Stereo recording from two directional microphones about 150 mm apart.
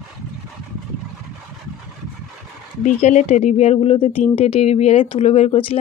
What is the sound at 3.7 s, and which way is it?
Speech, 35° left (ahead or behind).